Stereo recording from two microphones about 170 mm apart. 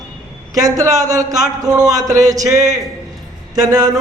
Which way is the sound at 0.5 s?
20° right (ahead or behind).